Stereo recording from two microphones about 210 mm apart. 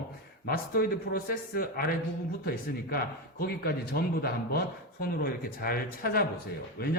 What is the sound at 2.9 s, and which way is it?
Speech, 50° left (ahead or behind).